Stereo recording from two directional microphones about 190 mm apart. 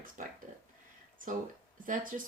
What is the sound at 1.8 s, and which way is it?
Speech, 45° right (ahead or behind).